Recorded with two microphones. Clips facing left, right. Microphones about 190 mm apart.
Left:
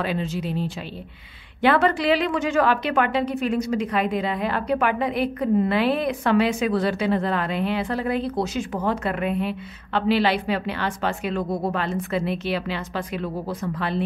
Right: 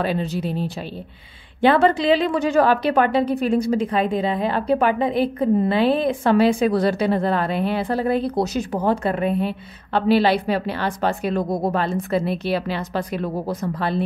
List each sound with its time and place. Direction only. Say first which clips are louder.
0.0 s a woman's voice: right 3 dB; 35° right (ahead or behind)
1.6 s a woman's voice: right 3 dB; 30° right (ahead or behind)